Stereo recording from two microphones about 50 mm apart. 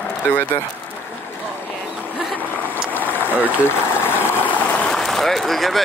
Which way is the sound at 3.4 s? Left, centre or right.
Right.